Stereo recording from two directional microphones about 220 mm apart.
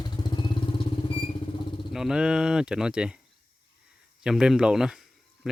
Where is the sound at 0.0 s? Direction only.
20° left (ahead or behind).